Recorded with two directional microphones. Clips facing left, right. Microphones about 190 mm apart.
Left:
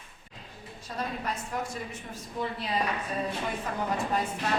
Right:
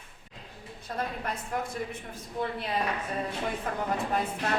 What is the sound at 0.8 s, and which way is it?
A woman's voice, 55° right (ahead or behind).